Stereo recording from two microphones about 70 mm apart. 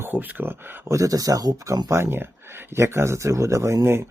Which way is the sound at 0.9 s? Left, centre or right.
Right.